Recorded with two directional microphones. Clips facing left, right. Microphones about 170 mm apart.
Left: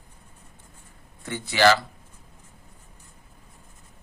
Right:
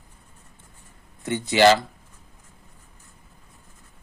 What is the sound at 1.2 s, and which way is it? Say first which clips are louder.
Speech: right 3 dB; 20° right (ahead or behind).